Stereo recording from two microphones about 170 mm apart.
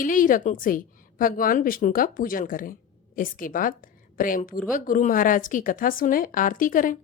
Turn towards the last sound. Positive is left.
turn(degrees=50)  # may be behind; listen again after turning